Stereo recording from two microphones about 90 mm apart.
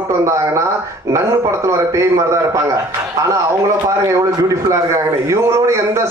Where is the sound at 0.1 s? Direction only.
35° right (ahead or behind).